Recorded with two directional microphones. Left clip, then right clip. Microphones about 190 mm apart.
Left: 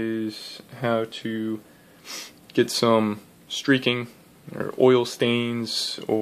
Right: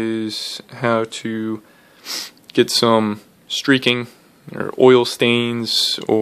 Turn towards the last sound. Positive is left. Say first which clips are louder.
# right 9 dB
turn(degrees=-30)  # may be behind; listen again after turning